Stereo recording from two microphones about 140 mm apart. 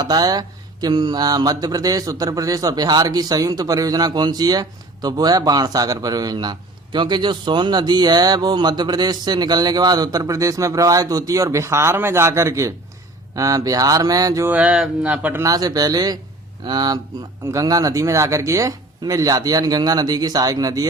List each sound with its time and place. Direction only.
0.0 s a man's voice: 30° right (ahead or behind)
14.5 s speech: 5° right (ahead or behind)
15.4 s a man's voice: 25° right (ahead or behind)